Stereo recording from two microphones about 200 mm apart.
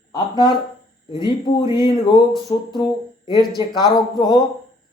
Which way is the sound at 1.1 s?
20° left (ahead or behind).